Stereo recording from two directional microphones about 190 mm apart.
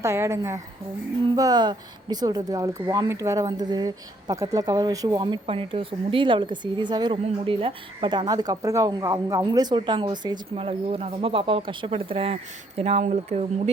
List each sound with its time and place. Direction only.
0.0 s a woman's voice: 15° right (ahead or behind); by 13.4 s 35° right (ahead or behind)